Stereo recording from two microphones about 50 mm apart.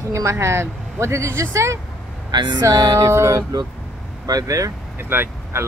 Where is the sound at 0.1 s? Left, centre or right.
Right.